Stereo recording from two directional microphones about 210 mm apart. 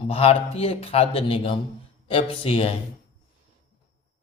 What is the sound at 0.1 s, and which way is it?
A man's voice, 30° left (ahead or behind).